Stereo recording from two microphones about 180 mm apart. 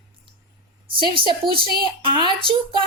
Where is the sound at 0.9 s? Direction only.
30° right (ahead or behind).